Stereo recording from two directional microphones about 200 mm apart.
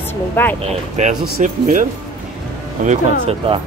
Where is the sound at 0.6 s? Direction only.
35° right (ahead or behind).